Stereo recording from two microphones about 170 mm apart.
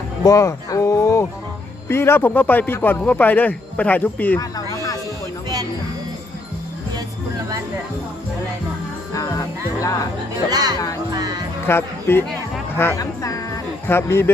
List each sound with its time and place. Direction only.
0.3 s speech: 20° left (ahead or behind)
4.4 s a sound: 20° left (ahead or behind)
9.1 s music: 20° left (ahead or behind)
10.5 s music: 25° right (ahead or behind)
11.6 s speech: 15° left (ahead or behind)